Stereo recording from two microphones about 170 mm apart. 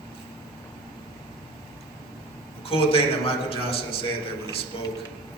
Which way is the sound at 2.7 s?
35° left (ahead or behind).